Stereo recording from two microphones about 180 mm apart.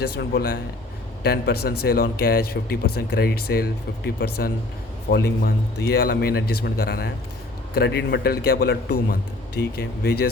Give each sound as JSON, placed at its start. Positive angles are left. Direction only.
{"t": 0.2, "sound": "speech", "side_deg": 60}